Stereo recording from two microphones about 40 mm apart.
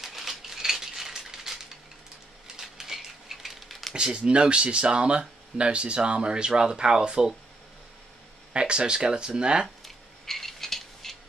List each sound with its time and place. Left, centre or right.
0.0 s a sound: centre
2.4 s patter: centre
3.9 s speech: right
8.5 s speech: right
9.8 s coin: centre